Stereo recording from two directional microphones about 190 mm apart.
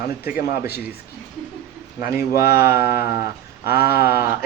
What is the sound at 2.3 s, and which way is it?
Speech, 55° left (ahead or behind).